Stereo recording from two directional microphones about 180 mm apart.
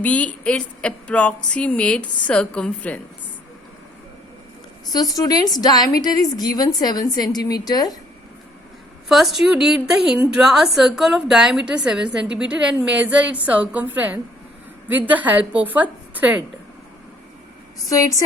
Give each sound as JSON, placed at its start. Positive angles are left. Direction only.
{"t": 0.0, "sound": "speech", "side_deg": 10}
{"t": 4.9, "sound": "a woman's voice", "side_deg": 20}
{"t": 9.0, "sound": "a woman's voice", "side_deg": 0}
{"t": 17.8, "sound": "a woman's voice", "side_deg": 20}